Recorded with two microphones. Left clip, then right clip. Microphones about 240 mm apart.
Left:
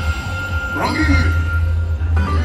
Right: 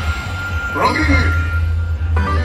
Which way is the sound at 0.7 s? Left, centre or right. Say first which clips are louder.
Right 3 dB; right.